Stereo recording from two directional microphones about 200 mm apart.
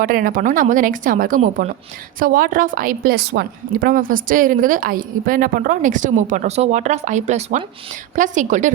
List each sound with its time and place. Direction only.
0.0 s a woman's voice: 45° right (ahead or behind)